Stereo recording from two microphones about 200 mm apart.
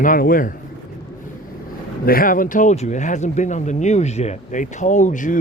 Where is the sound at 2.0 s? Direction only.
45° left (ahead or behind).